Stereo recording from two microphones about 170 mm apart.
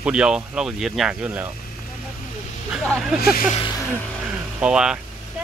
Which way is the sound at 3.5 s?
30° left (ahead or behind).